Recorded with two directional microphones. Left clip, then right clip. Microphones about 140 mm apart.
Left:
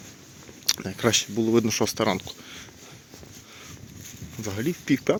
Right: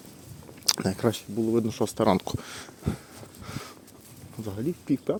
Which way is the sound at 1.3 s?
25° left (ahead or behind).